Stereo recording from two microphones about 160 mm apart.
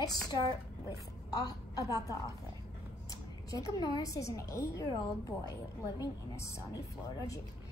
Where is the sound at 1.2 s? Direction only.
25° left (ahead or behind).